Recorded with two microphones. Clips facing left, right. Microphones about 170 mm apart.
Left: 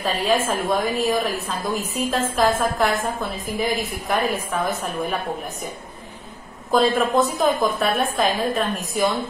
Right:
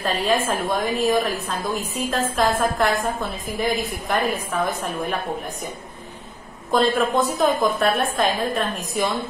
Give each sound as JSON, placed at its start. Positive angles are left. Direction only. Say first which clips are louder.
{"t": 0.0, "sound": "a woman's voice", "louder": "even", "side_deg": 0}
{"t": 6.7, "sound": "a woman's voice", "louder": "left 1 dB", "side_deg": 0}